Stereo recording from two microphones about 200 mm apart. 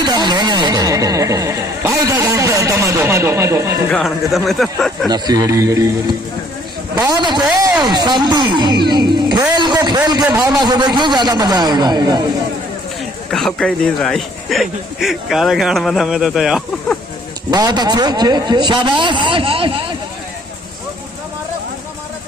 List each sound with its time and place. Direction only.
0.0 s speech: 20° right (ahead or behind)
3.9 s a man's voice: centre (ahead or behind)
5.1 s a man's voice: 20° right (ahead or behind)
7.0 s a man's voice: 20° right (ahead or behind)
9.6 s a sound: 20° right (ahead or behind)
10.4 s a man's voice: 20° right (ahead or behind)
13.3 s a man's voice: centre (ahead or behind)
17.5 s a man's voice: 20° right (ahead or behind)